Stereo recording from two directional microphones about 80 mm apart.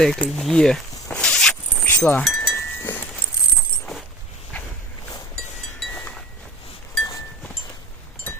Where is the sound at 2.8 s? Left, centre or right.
Left.